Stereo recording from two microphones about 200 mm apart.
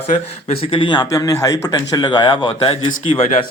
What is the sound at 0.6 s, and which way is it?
Speech, 25° left (ahead or behind).